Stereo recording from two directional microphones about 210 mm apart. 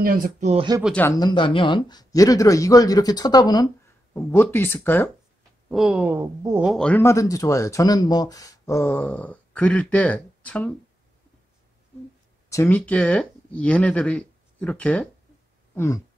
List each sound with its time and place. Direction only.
0.0 s speech: 40° right (ahead or behind)
0.8 s speech: 10° left (ahead or behind)
5.7 s speech: centre (ahead or behind)
6.7 s speech: 5° left (ahead or behind)
12.4 s speech: 10° left (ahead or behind)
15.7 s a sound: 10° left (ahead or behind)